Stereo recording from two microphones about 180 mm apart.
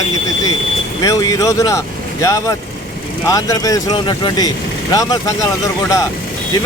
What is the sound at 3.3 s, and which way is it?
Speech, 20° left (ahead or behind).